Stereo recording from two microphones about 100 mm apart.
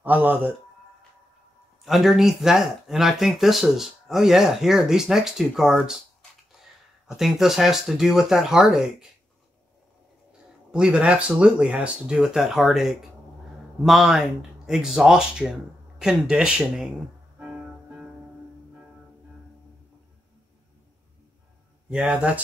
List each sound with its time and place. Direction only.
0.0 s speech: 20° right (ahead or behind)
1.9 s speech: centre (ahead or behind)
7.2 s speech: 5° right (ahead or behind)
10.7 s speech: 10° right (ahead or behind)
17.4 s music: 10° right (ahead or behind)
21.8 s speech: 5° right (ahead or behind)